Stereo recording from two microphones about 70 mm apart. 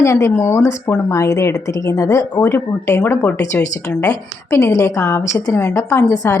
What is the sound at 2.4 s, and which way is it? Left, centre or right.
A woman's voice, left.